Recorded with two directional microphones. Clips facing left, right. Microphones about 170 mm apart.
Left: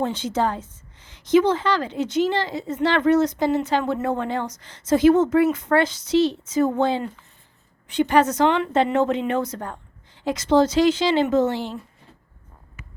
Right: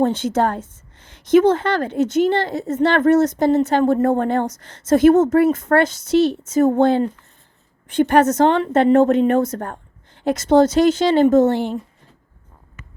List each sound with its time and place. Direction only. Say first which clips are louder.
0.0 s a woman's voice: right 5 dB; 50° right (ahead or behind)